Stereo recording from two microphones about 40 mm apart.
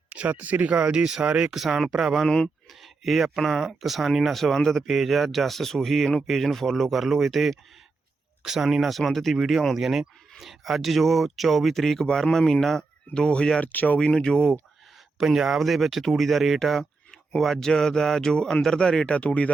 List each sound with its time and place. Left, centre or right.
0.1 s speech: right
0.9 s speech: centre
1.5 s speech: centre
1.9 s speech: centre
2.2 s speech: centre
2.6 s a sound: centre
3.3 s speech: centre
4.9 s speech: centre
13.1 s speech: left
13.6 s speech: left
14.0 s speech: left
15.2 s speech: centre
16.6 s a sound: centre
17.4 s speech: centre; by 19.5 s left